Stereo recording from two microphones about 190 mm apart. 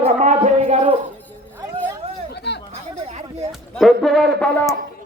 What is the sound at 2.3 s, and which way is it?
Chatter, 65° left (ahead or behind).